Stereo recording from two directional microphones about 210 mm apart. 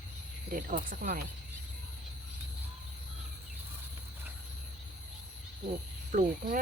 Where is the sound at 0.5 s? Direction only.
40° right (ahead or behind).